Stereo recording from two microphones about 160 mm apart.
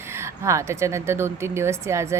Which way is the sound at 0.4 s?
20° right (ahead or behind).